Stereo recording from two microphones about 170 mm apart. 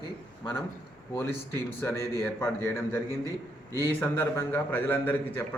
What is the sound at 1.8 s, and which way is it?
A man's voice, 15° left (ahead or behind).